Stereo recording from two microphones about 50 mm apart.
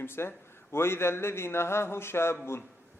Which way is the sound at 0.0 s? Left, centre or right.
Left.